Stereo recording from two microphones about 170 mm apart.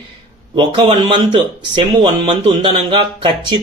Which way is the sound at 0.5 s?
30° right (ahead or behind).